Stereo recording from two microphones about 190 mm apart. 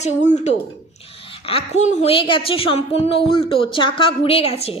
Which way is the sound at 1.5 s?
35° left (ahead or behind).